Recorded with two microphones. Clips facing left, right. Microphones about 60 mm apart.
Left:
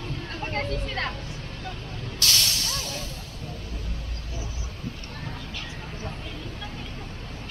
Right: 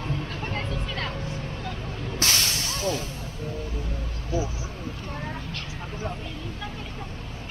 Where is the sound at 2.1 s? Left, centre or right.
Right.